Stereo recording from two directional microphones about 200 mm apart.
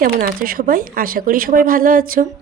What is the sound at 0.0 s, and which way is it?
A woman's voice, 45° right (ahead or behind).